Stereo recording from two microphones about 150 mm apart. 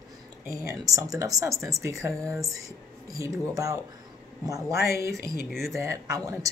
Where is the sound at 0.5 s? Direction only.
20° right (ahead or behind).